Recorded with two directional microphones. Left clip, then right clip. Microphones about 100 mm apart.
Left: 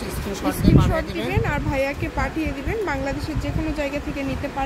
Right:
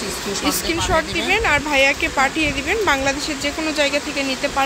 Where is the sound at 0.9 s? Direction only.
25° right (ahead or behind).